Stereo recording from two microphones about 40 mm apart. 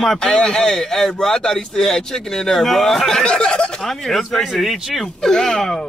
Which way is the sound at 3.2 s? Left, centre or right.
Left.